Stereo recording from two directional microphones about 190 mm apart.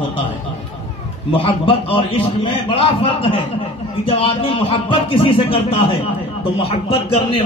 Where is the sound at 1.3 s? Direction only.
30° left (ahead or behind).